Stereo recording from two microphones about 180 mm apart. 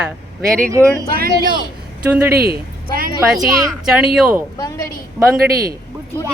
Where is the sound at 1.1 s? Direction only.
55° right (ahead or behind).